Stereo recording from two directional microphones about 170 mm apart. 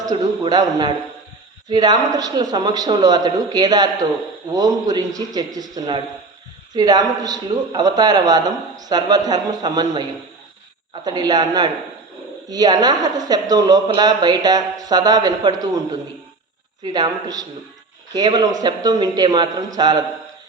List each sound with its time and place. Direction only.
0.0 s speech: 25° right (ahead or behind)